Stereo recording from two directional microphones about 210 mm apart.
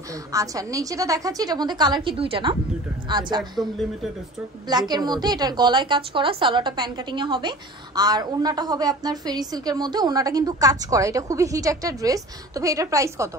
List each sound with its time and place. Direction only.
0.1 s a woman's voice: 15° right (ahead or behind)
4.6 s a woman's voice: 20° right (ahead or behind)